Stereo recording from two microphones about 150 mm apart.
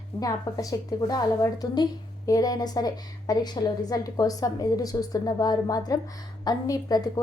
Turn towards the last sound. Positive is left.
turn(degrees=25)  # may be behind; listen again after turning